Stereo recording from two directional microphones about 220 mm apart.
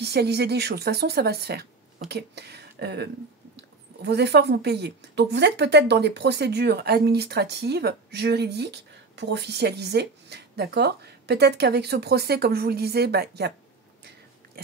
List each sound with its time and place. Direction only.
0.0 s speech: 45° right (ahead or behind)